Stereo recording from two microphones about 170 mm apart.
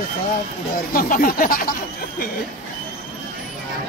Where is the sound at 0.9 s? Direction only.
55° left (ahead or behind).